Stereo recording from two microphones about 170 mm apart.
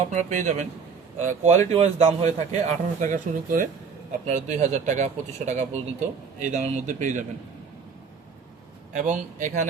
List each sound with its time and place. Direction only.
0.1 s a man's voice: 45° right (ahead or behind)
8.9 s a man's voice: 45° right (ahead or behind)